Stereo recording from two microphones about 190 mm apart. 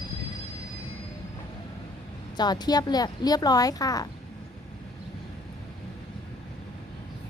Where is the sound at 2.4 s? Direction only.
20° left (ahead or behind).